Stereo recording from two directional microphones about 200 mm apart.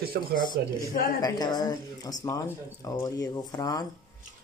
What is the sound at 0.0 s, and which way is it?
Speech, 50° right (ahead or behind).